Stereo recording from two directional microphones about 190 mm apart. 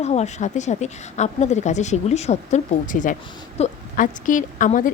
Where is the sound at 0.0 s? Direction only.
35° left (ahead or behind).